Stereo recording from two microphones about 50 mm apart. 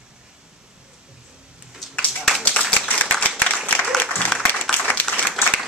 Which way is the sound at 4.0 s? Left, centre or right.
Left.